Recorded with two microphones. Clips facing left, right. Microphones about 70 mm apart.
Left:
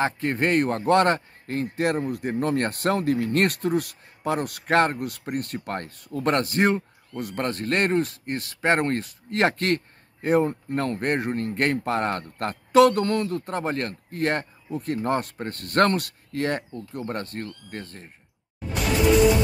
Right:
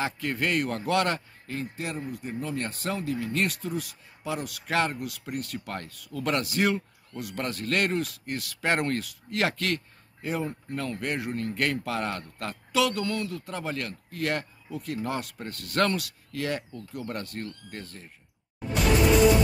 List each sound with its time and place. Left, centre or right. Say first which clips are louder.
0.0 s a man's voice: left 5 dB; left